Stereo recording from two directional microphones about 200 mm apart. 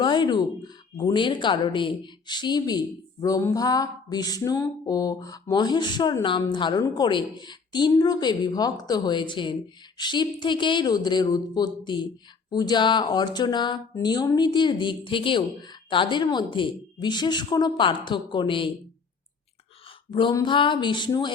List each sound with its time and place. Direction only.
0.0 s speech: 25° left (ahead or behind)
20.1 s speech: 25° left (ahead or behind)